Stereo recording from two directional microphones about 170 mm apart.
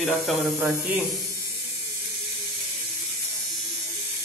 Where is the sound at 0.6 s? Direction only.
10° right (ahead or behind).